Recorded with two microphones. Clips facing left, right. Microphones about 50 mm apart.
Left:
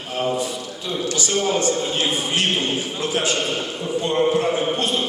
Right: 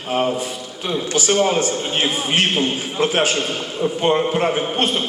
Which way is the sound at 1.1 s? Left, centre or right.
Right.